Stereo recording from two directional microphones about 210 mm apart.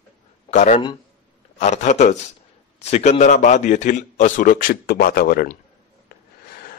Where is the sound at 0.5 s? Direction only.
35° left (ahead or behind).